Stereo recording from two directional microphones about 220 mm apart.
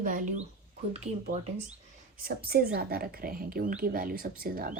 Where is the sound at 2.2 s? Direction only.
45° right (ahead or behind).